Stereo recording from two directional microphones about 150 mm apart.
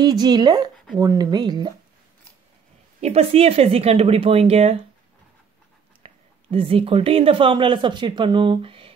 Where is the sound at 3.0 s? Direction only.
45° right (ahead or behind).